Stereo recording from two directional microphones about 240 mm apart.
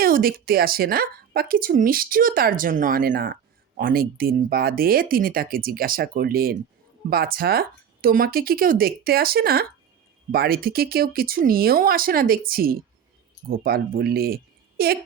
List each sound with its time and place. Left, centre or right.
0.0 s a woman's voice: right